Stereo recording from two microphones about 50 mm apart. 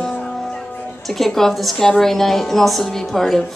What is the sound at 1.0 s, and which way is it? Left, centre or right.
A woman's voice, centre.